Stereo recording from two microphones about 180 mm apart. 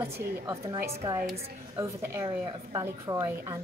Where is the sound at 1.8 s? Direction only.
20° right (ahead or behind).